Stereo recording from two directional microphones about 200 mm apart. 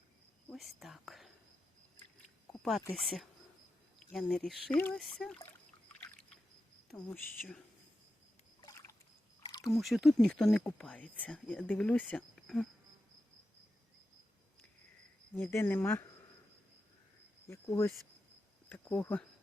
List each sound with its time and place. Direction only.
0.5 s speech: centre (ahead or behind)
2.5 s speech: centre (ahead or behind)
6.0 s rowboat: 5° left (ahead or behind)
6.9 s speech: centre (ahead or behind)
9.4 s a sound: 20° left (ahead or behind)
9.7 s speech: centre (ahead or behind)
15.4 s speech: 10° left (ahead or behind)
17.5 s speech: 15° left (ahead or behind)